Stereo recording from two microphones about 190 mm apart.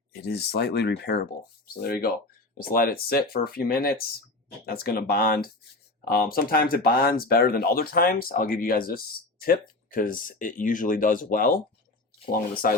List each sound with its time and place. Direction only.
0.1 s speech: 55° left (ahead or behind)
12.6 s speech: 50° left (ahead or behind)